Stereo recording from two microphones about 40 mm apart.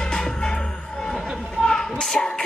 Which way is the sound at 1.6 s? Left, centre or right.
Centre.